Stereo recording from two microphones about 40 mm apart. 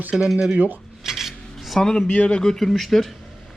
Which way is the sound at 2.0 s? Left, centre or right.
Left.